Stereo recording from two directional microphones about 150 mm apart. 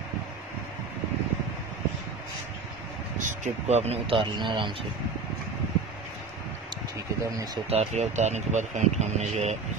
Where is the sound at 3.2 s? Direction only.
55° right (ahead or behind); by 4.7 s 30° right (ahead or behind).